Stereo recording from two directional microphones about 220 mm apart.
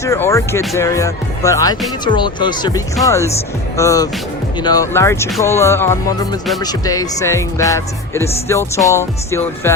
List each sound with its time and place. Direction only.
0.0 s speech: 15° left (ahead or behind)